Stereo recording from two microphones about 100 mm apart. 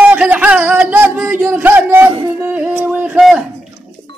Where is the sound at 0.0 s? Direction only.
15° right (ahead or behind).